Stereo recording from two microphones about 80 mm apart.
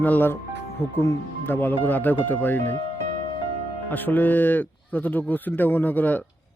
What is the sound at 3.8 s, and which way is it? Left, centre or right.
Speech, left.